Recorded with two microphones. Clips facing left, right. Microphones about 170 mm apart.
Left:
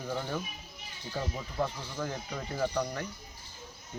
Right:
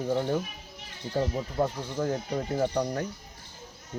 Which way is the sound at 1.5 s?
45° right (ahead or behind).